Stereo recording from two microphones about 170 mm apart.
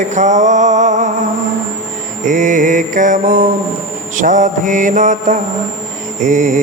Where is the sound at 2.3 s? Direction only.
50° right (ahead or behind).